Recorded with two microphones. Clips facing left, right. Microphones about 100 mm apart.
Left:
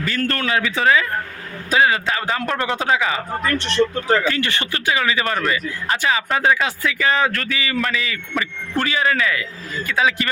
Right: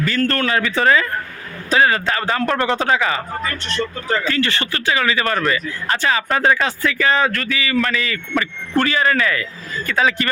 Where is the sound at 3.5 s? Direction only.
90° left.